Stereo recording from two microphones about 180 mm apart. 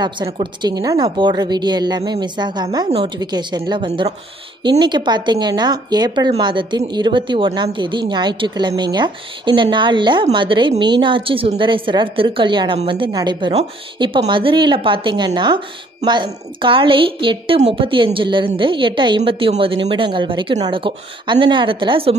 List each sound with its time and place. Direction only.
0.0 s speech: 25° right (ahead or behind)